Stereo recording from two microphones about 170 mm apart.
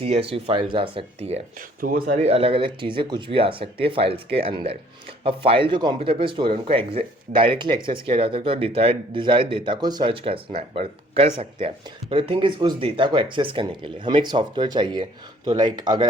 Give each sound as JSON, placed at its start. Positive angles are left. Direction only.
{"t": 0.0, "sound": "speech", "side_deg": -35}
{"t": 1.8, "sound": "speech", "side_deg": -55}
{"t": 2.2, "sound": "speech", "side_deg": -35}